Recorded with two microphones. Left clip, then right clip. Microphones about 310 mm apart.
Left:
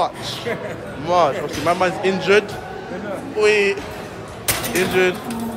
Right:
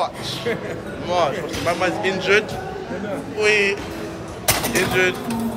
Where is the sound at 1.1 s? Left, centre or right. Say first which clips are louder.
Left 4 dB; centre.